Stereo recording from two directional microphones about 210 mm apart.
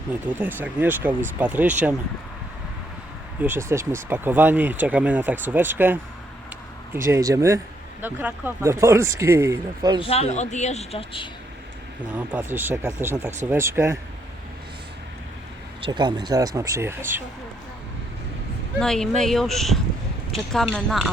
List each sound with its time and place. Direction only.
0.1 s speech: 10° right (ahead or behind)
3.4 s speech: 10° right (ahead or behind)
10.0 s speech: 30° left (ahead or behind)
12.1 s speech: 10° right (ahead or behind)
15.8 s speech: 20° right (ahead or behind)
18.8 s speech: centre (ahead or behind)